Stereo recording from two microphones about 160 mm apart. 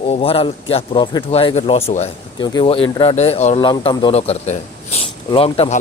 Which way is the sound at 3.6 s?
30° left (ahead or behind).